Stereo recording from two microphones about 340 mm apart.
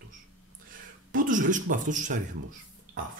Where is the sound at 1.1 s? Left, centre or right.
Right.